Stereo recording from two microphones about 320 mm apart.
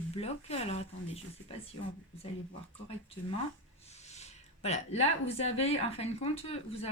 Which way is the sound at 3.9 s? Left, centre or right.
Left.